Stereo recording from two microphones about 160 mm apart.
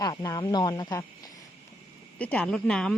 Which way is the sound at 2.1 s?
10° left (ahead or behind).